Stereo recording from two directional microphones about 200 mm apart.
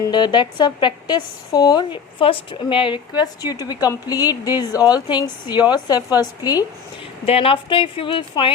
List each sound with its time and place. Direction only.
0.1 s a woman's voice: 20° left (ahead or behind)
7.3 s a woman's voice: 30° left (ahead or behind)